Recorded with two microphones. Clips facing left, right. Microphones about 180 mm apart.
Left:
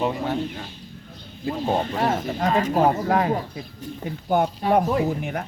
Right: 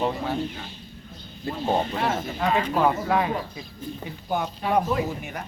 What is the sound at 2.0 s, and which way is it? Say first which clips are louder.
Speech: left 3 dB; 40° left (ahead or behind).